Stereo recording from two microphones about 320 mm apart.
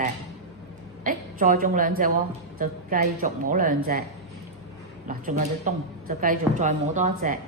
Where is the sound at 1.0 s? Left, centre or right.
Right.